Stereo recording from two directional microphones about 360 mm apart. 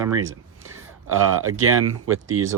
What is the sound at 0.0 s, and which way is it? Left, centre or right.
Speech, centre.